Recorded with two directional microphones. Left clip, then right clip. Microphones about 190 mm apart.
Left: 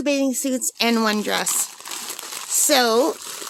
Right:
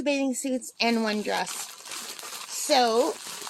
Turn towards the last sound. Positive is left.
turn(degrees=45)  # may be behind; listen again after turning